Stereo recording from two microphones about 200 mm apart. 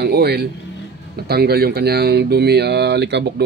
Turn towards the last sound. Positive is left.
turn(degrees=-55)  # may be behind; listen again after turning